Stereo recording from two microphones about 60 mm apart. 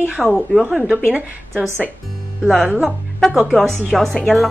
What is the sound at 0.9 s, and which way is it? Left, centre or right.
Speech, right.